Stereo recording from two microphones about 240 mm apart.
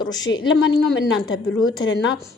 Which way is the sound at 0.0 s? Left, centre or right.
Centre.